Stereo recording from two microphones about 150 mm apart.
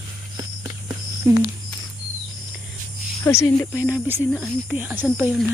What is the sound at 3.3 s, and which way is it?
Speech, 20° left (ahead or behind).